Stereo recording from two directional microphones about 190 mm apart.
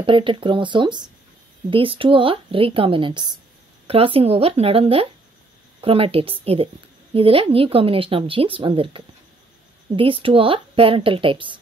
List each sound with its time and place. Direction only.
0.0 s speech: 25° right (ahead or behind)